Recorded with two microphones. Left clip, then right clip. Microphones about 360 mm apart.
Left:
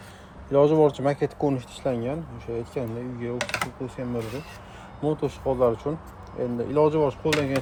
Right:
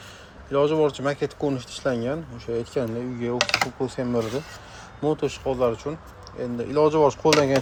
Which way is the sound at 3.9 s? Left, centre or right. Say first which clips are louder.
Right 5 dB; right.